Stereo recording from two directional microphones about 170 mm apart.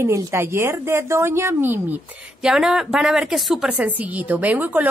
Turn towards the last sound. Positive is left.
turn(degrees=-10)  # may be behind; listen again after turning